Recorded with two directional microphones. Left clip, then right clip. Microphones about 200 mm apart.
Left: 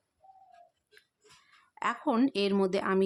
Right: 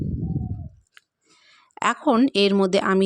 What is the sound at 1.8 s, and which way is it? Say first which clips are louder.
Speech: right 9 dB; 40° right (ahead or behind).